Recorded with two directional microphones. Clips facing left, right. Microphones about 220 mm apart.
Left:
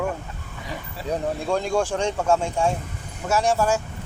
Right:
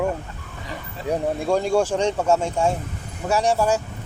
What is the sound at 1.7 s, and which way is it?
Speech, 10° right (ahead or behind).